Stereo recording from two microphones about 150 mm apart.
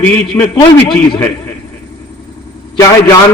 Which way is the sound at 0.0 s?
10° left (ahead or behind).